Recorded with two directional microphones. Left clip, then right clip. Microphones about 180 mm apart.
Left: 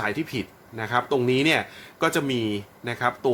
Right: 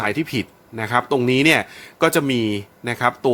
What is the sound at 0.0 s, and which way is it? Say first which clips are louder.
Speech: right 5 dB; 40° right (ahead or behind).